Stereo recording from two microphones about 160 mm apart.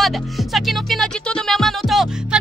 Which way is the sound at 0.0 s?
Centre (ahead or behind).